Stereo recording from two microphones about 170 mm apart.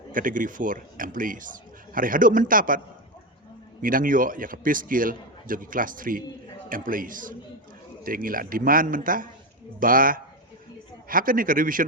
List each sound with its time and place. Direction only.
0.1 s a man's voice: 55° right (ahead or behind)